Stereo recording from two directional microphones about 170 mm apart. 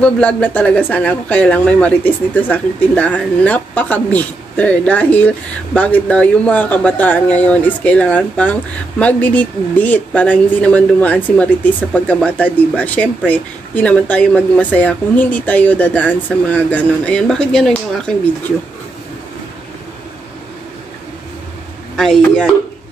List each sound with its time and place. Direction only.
0.0 s speech: 5° left (ahead or behind)
21.9 s speech: centre (ahead or behind)